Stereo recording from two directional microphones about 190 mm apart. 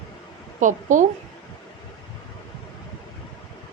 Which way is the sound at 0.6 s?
40° right (ahead or behind).